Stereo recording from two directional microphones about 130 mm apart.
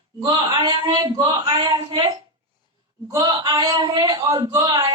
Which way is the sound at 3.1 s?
25° right (ahead or behind).